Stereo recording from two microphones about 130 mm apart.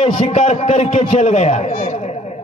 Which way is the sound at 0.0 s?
50° left (ahead or behind).